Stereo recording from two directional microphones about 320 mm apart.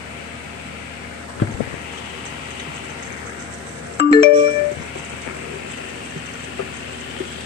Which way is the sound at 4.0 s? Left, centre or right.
Centre.